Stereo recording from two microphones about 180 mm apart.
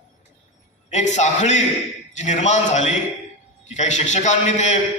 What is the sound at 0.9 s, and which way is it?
A man's voice, 40° left (ahead or behind).